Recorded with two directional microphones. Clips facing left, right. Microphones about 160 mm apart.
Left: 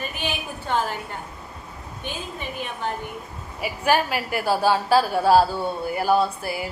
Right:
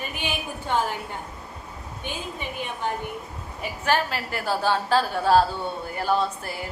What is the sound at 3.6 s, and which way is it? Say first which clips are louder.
Speech: left 3 dB; 10° left (ahead or behind).